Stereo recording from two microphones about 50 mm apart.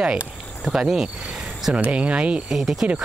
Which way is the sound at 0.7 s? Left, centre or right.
Centre.